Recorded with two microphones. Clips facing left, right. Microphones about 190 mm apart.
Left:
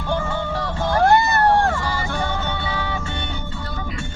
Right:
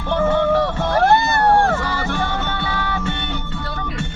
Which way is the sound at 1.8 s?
65° right (ahead or behind).